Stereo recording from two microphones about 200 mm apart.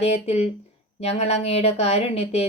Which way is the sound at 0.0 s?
30° left (ahead or behind).